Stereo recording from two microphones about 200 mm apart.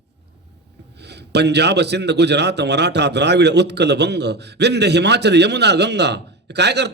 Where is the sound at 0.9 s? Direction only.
55° right (ahead or behind).